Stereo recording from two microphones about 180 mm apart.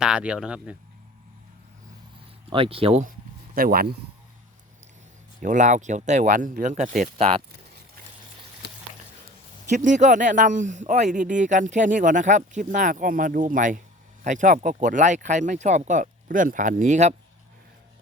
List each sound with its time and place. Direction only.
0.0 s speech: 5° right (ahead or behind)
2.5 s speech: 30° right (ahead or behind)
3.0 s speech: 50° right (ahead or behind)
5.4 s speech: 45° right (ahead or behind)
8.6 s a sound: 70° left (ahead or behind)
9.6 s speech: 40° right (ahead or behind)